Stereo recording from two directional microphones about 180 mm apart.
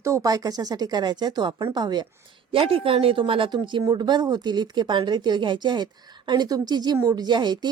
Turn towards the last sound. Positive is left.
turn(degrees=-25)  # may be behind; listen again after turning